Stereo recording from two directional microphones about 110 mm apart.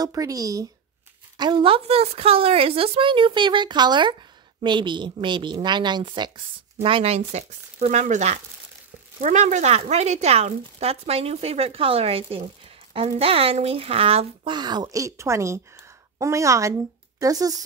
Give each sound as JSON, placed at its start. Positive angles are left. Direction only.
{"t": 0.0, "sound": "speech", "side_deg": -35}
{"t": 1.4, "sound": "a woman's voice", "side_deg": -50}
{"t": 6.8, "sound": "speech", "side_deg": -65}
{"t": 14.5, "sound": "a woman's voice", "side_deg": -40}